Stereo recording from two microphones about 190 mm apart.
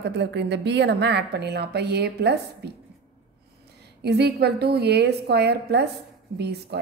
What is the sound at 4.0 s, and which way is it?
A woman's voice, 60° right (ahead or behind).